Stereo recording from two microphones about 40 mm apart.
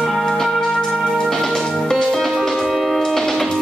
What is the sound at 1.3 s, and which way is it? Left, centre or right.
Music, centre.